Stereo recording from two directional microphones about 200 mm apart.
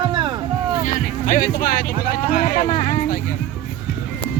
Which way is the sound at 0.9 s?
45° left (ahead or behind).